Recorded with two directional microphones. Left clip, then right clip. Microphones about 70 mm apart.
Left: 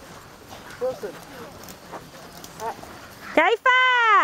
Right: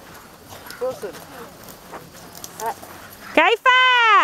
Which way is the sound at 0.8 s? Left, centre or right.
Right.